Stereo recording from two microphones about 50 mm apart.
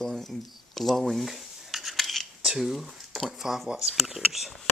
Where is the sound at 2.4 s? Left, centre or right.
Centre.